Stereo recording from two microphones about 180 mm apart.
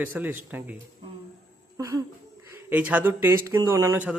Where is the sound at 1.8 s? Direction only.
20° right (ahead or behind).